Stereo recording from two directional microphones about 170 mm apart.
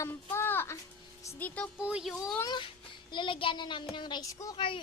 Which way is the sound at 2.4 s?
25° left (ahead or behind).